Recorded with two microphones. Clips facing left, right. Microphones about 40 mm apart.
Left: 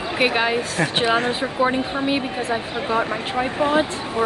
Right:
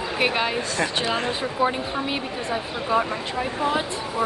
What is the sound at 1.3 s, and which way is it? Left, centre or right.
Speech, left.